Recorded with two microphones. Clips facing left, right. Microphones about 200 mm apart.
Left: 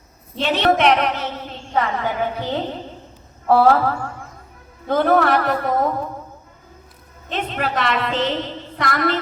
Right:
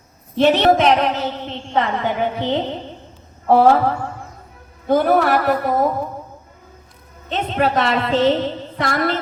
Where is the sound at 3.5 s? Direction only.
20° right (ahead or behind).